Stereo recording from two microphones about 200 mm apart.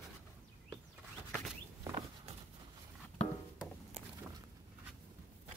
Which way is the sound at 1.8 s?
25° right (ahead or behind).